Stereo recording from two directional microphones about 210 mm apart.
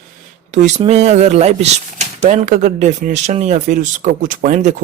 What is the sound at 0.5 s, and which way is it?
Speech, 35° right (ahead or behind).